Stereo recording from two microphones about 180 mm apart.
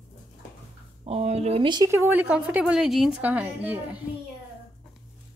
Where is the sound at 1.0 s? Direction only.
35° right (ahead or behind); by 4.0 s 10° right (ahead or behind).